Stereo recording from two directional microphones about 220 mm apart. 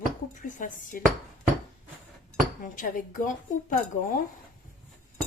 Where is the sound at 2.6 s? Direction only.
35° left (ahead or behind).